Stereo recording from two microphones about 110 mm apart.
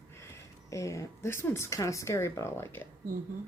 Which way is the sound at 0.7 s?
30° left (ahead or behind).